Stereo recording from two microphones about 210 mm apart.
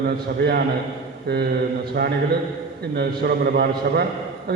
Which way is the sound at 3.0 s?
50° right (ahead or behind).